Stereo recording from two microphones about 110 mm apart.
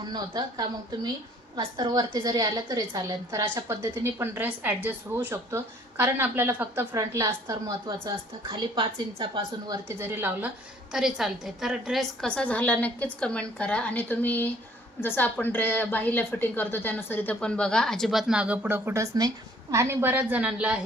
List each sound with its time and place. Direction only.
0.0 s a woman's voice: 40° right (ahead or behind)
8.0 s a woman's voice: 45° right (ahead or behind)
9.4 s a woman's voice: 35° right (ahead or behind)
10.0 s speech: 20° right (ahead or behind)
10.9 s a woman's voice: 5° right (ahead or behind)
12.3 s a woman's voice: 10° left (ahead or behind); by 20.8 s 10° right (ahead or behind)